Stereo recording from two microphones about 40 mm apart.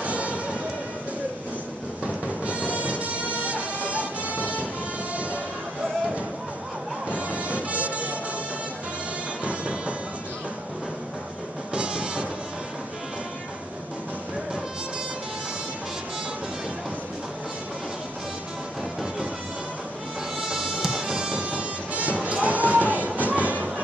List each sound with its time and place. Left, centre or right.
0.0 s music: right
2.2 s music: right
7.1 s music: right
9.4 s music: right
11.7 s music: right
20.3 s music: centre; by 23.7 s right